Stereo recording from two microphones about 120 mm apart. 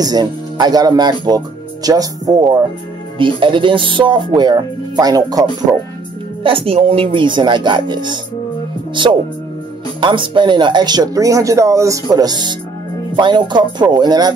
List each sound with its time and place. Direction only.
0.0 s speech: 35° right (ahead or behind)
3.2 s speech: 45° right (ahead or behind)
6.4 s speech: 50° right (ahead or behind)
9.9 s speech: 45° right (ahead or behind)